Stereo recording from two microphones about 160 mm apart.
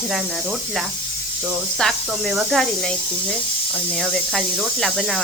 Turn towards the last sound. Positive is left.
turn(degrees=0)  # may be behind; listen again after turning